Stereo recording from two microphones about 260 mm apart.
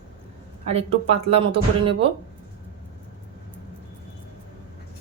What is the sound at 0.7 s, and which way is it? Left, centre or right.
Speech, right.